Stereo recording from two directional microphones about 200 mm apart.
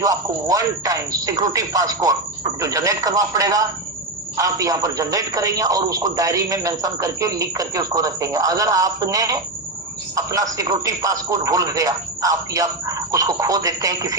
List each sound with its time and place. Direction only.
0.0 s a man's voice: 15° right (ahead or behind)